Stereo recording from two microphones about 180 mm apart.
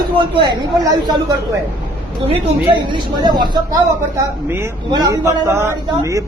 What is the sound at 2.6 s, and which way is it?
A woman's voice, 25° right (ahead or behind).